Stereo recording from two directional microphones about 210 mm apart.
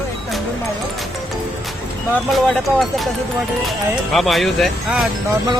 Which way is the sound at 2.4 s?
Centre (ahead or behind).